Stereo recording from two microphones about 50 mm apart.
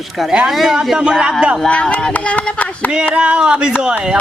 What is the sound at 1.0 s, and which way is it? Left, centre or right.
Speech, centre.